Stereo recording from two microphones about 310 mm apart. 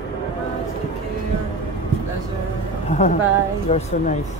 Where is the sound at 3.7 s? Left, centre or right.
Left.